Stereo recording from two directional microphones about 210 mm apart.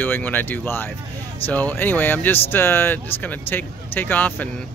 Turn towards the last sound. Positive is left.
turn(degrees=5)  # may be behind; listen again after turning